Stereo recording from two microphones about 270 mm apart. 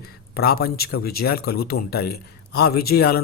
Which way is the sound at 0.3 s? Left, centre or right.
Left.